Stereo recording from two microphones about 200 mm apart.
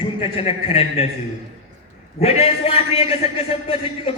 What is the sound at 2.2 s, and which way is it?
A man's voice, 30° left (ahead or behind).